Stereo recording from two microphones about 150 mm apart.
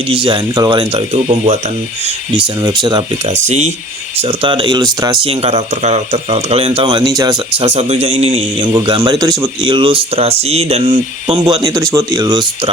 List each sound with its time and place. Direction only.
0.1 s speech: 35° right (ahead or behind)
2.6 s speech: 30° right (ahead or behind)
3.2 s a man's voice: 50° right (ahead or behind)
4.2 s speech: 35° right (ahead or behind)
5.2 s speech: 40° right (ahead or behind)
6.8 s speech: 25° right (ahead or behind)
7.7 s a man's voice: 45° right (ahead or behind)
8.6 s speech: 30° right (ahead or behind)